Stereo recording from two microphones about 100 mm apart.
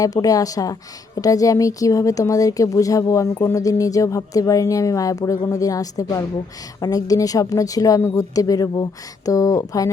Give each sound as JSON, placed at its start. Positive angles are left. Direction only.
{"t": 0.0, "sound": "speech", "side_deg": 35}